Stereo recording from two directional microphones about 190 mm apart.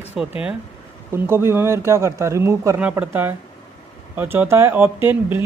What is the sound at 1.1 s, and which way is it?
Speech, 10° right (ahead or behind).